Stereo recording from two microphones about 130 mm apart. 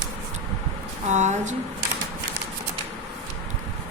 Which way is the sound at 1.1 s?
65° right (ahead or behind).